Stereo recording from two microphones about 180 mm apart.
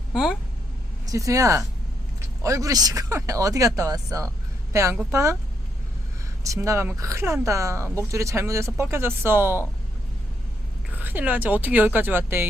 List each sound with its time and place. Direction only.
0.1 s speech: 5° right (ahead or behind)
1.0 s a woman's voice: 20° right (ahead or behind)
6.4 s speech: 15° right (ahead or behind)
10.9 s speech: 10° right (ahead or behind)